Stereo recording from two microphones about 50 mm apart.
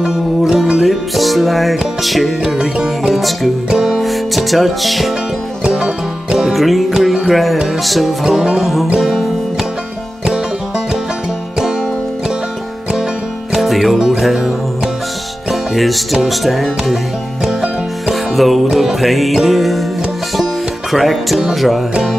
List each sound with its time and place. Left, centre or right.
0.0 s music: centre
5.6 s music: centre
6.5 s music: centre
13.5 s music: centre
15.7 s music: centre
18.3 s music: centre
20.9 s music: centre